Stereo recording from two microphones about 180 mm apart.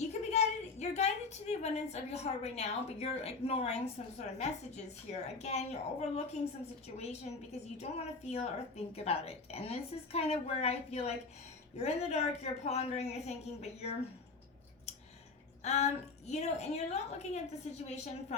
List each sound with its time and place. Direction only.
0.0 s a woman's voice: 40° left (ahead or behind)
15.6 s a woman's voice: 35° left (ahead or behind)